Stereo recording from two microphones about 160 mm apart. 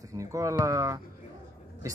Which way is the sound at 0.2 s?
20° right (ahead or behind).